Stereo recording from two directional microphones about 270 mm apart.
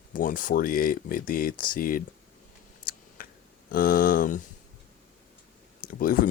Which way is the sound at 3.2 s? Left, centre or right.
Left.